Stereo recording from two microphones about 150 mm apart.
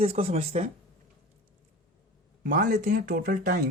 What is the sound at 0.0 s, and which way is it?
Speech, 40° right (ahead or behind).